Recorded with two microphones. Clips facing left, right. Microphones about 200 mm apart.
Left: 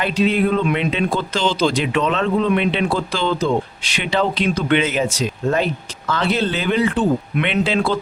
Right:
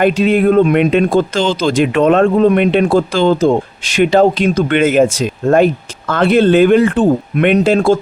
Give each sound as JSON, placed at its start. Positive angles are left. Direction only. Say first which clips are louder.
{"t": 0.0, "sound": "speech", "louder": "right 7 dB", "side_deg": -50}